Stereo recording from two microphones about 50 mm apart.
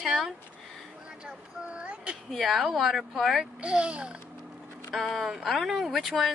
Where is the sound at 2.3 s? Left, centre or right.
Centre.